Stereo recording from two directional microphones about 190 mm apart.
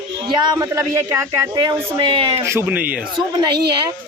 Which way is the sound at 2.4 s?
15° right (ahead or behind).